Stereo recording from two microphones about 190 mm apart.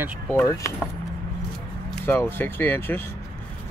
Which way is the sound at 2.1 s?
10° left (ahead or behind).